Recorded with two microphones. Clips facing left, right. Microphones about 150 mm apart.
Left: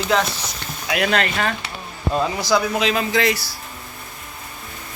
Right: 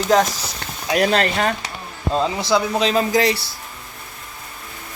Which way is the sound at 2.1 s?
25° right (ahead or behind).